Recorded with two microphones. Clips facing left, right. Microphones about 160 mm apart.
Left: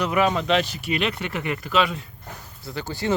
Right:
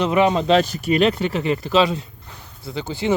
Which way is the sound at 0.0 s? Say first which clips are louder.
Right 4 dB; 25° right (ahead or behind).